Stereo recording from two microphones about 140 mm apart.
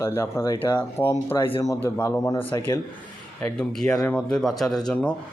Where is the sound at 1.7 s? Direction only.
20° left (ahead or behind).